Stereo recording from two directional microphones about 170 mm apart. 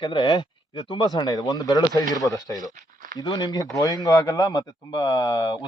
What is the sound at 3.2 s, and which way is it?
Speech, 25° left (ahead or behind).